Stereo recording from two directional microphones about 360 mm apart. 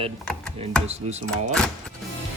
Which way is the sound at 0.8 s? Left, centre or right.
Centre.